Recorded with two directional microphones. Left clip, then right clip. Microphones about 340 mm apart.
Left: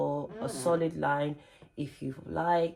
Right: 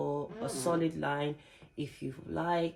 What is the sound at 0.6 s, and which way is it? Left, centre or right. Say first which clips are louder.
Speech: left 4 dB; centre.